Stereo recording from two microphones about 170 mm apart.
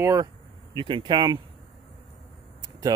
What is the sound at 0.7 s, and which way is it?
Speech, 30° right (ahead or behind).